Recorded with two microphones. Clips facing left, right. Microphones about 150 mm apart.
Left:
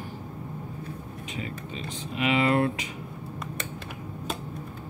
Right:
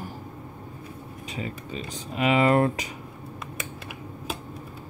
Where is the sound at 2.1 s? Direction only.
40° right (ahead or behind).